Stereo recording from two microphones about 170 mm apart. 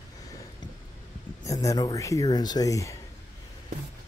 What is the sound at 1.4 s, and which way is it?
Speech, 20° left (ahead or behind).